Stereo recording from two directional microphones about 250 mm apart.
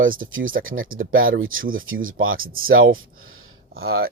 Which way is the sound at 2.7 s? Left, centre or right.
Right.